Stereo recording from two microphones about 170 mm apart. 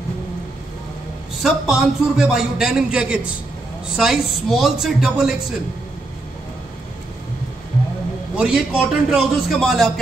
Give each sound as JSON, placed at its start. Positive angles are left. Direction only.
{"t": 1.4, "sound": "a man's voice", "side_deg": 0}
{"t": 8.4, "sound": "a man's voice", "side_deg": -5}